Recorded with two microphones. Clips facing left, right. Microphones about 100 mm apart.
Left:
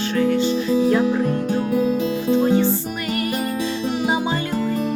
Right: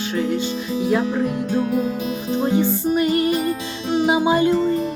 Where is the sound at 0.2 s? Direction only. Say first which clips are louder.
Left 4 dB; 20° right (ahead or behind).